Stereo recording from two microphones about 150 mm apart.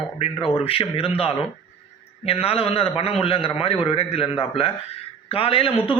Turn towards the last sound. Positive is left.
turn(degrees=35)  # may be behind; listen again after turning